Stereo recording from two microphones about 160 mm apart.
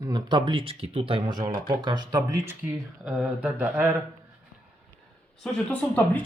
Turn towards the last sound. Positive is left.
turn(degrees=10)  # may be behind; listen again after turning